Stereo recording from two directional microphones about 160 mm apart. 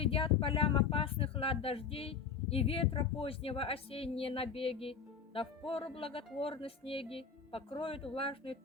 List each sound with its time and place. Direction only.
0.0 s speech: 35° left (ahead or behind)